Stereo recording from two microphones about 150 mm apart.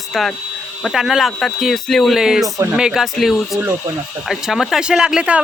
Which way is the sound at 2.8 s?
5° right (ahead or behind).